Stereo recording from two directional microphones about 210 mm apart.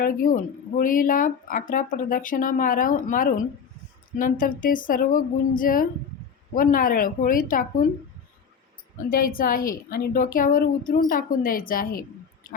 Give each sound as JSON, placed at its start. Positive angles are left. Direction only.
{"t": 0.0, "sound": "speech", "side_deg": 40}
{"t": 9.0, "sound": "a woman's voice", "side_deg": 45}